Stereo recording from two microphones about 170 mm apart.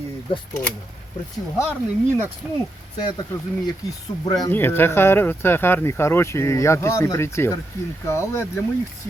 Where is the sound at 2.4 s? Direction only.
5° right (ahead or behind).